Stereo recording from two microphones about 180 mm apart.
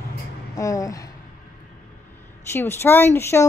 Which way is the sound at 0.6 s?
20° left (ahead or behind).